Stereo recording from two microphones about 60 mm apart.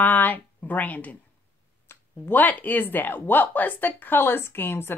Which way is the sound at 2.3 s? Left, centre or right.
Left.